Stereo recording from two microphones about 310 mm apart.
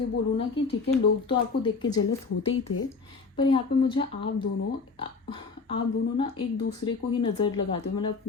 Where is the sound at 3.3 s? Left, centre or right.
Centre.